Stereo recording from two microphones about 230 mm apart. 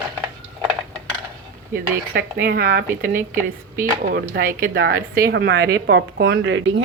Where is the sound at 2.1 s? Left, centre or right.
Right.